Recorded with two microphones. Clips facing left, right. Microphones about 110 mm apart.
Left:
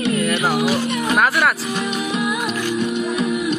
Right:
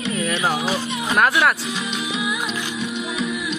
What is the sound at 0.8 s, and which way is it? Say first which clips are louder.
Music: left 5 dB; 60° left (ahead or behind).